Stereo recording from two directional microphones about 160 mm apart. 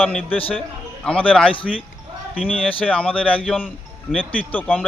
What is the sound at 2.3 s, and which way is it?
Speech, 5° right (ahead or behind).